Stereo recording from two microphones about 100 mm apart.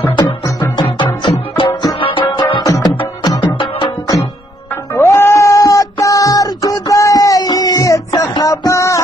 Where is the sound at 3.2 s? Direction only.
50° left (ahead or behind).